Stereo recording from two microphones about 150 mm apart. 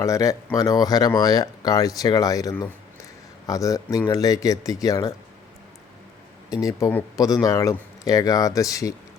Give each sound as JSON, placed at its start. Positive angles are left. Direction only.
{"t": 0.0, "sound": "speech", "side_deg": 20}
{"t": 6.5, "sound": "speech", "side_deg": 20}